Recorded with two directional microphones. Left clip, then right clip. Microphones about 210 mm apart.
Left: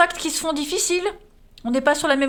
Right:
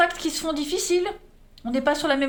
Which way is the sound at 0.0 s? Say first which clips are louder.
Left 3 dB; 40° left (ahead or behind).